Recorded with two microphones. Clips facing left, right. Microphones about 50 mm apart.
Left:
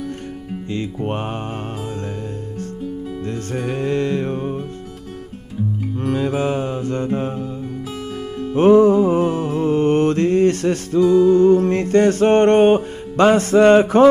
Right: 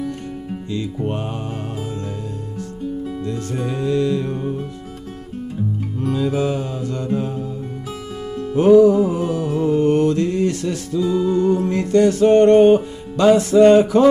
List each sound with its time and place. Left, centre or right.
0.7 s music: left
3.3 s music: left
6.0 s mantra: left
8.5 s mantra: left